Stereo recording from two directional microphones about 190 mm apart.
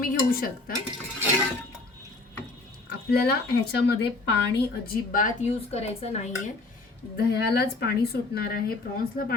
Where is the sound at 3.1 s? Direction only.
55° left (ahead or behind).